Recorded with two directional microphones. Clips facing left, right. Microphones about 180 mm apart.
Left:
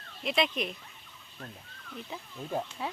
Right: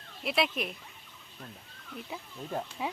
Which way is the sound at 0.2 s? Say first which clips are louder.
Left 1 dB; 5° right (ahead or behind).